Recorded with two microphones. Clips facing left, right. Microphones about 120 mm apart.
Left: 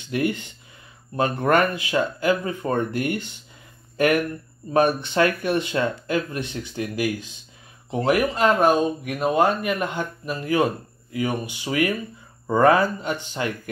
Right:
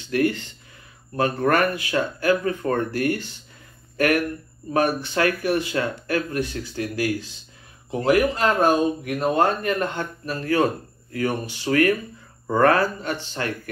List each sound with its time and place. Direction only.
0.1 s speech: 20° left (ahead or behind)
3.9 s a sound: 20° left (ahead or behind)
4.7 s speech: 25° left (ahead or behind)